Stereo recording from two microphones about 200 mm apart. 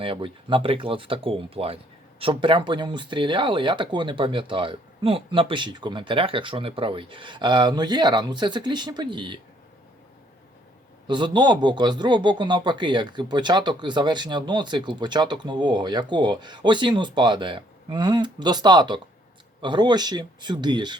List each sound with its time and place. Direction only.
0.0 s speech: 25° right (ahead or behind)
11.0 s speech: 25° right (ahead or behind)